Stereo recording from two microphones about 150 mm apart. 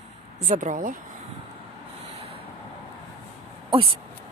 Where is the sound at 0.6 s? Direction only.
60° right (ahead or behind).